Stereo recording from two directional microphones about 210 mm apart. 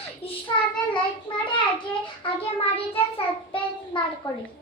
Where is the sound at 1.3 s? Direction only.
20° left (ahead or behind).